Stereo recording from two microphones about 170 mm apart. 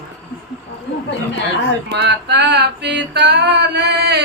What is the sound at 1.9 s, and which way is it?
Music, 85° right.